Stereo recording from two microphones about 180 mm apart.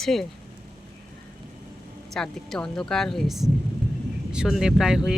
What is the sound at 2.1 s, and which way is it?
Speech, centre (ahead or behind).